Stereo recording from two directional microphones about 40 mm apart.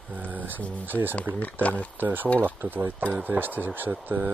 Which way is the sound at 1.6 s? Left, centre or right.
Left.